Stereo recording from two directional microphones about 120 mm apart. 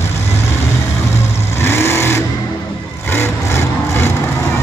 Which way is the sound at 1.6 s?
20° left (ahead or behind).